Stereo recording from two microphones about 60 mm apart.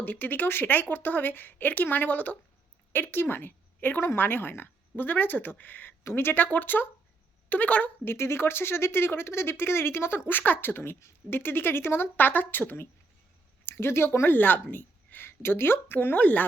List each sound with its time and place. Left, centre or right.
0.0 s speech: left
6.0 s a woman's voice: left
8.0 s a woman's voice: left